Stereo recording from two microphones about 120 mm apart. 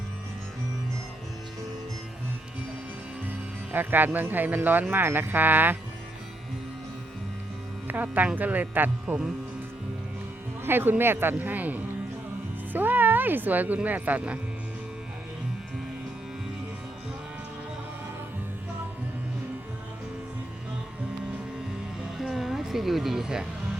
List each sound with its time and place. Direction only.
3.2 s speech: 15° right (ahead or behind)
7.9 s speech: 15° right (ahead or behind)
10.6 s speech: 15° right (ahead or behind)
22.2 s music: centre (ahead or behind)